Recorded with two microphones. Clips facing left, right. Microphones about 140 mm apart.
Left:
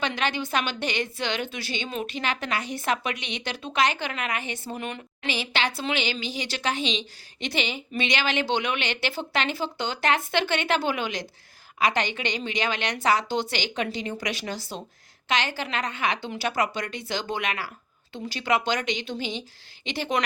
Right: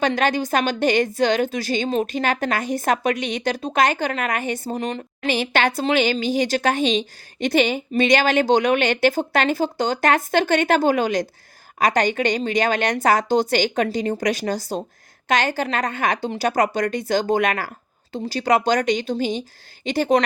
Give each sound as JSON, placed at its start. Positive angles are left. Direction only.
{"t": 0.0, "sound": "a woman's voice", "side_deg": -45}